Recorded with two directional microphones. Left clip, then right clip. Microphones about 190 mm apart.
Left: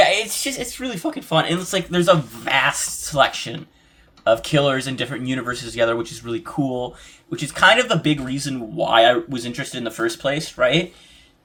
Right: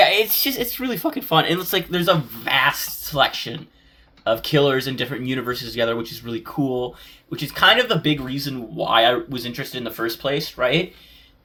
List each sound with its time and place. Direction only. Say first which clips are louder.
0.0 s speech: right 1 dB; 20° right (ahead or behind)
2.0 s speech: left 5 dB; 10° right (ahead or behind)